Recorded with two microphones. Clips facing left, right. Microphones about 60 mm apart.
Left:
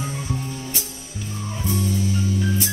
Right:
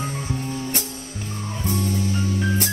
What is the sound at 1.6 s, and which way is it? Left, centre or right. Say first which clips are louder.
Music: even; right.